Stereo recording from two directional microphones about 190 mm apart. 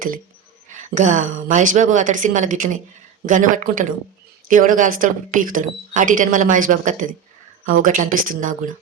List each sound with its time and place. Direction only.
0.9 s speech: 40° right (ahead or behind)